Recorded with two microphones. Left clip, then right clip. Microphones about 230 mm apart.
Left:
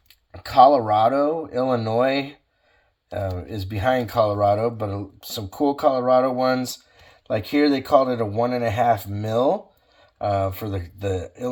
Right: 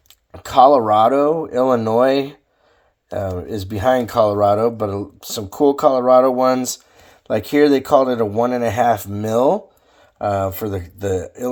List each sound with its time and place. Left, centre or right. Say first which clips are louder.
0.3 s speech: right 3 dB; right